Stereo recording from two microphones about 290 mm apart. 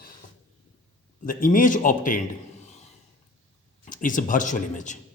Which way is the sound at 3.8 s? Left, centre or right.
Left.